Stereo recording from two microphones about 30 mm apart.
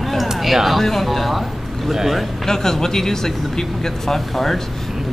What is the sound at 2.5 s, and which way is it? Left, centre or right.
A man's voice, centre.